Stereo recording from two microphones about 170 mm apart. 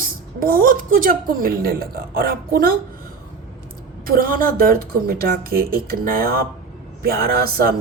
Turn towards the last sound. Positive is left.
turn(degrees=-65)  # may be behind; listen again after turning